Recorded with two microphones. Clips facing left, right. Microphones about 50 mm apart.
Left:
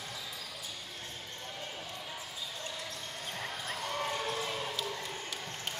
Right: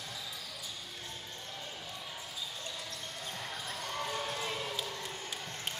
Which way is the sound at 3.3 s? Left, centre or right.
Left.